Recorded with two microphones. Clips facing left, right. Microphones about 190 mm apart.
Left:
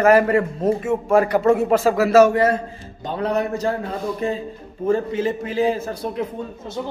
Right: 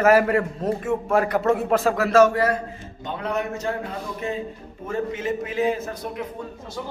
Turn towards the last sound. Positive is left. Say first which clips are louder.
# left 4 dB
turn(degrees=25)  # may be behind; listen again after turning